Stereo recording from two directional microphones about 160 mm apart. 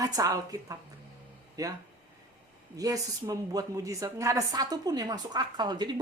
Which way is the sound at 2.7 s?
20° right (ahead or behind).